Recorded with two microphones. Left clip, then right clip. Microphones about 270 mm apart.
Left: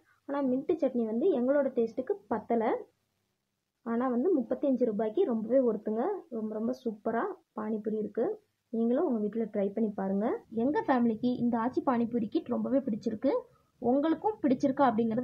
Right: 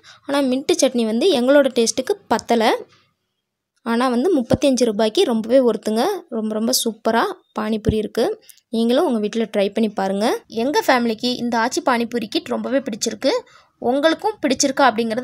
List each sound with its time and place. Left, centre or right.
0.3 s speech: right
3.8 s a woman's voice: right